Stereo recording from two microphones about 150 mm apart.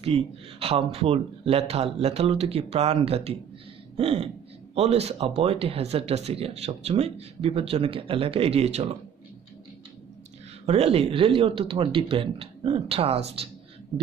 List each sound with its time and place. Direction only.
0.0 s speech: 40° right (ahead or behind)
3.9 s a sound: 40° right (ahead or behind)
4.7 s speech: 45° right (ahead or behind)
10.6 s speech: 45° right (ahead or behind)